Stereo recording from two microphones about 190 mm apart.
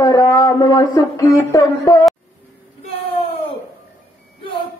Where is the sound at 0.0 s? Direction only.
20° left (ahead or behind).